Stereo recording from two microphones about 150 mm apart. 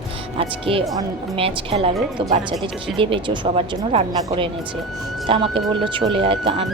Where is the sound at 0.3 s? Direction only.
35° right (ahead or behind).